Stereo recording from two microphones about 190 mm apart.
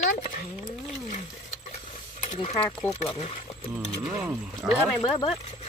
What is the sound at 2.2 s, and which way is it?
Mechanisms, 40° left (ahead or behind).